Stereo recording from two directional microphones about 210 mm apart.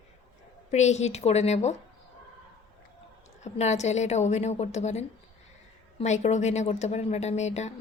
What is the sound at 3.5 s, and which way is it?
A woman's voice, 30° left (ahead or behind).